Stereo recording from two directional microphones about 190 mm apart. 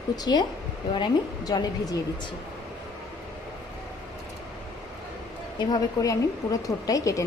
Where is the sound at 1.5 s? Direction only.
20° left (ahead or behind).